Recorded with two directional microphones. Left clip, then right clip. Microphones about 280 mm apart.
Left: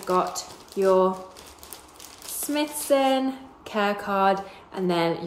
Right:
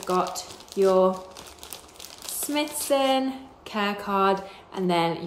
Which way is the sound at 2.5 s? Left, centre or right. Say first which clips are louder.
Left 2 dB; centre.